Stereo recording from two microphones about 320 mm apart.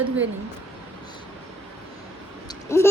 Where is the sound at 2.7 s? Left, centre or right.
Centre.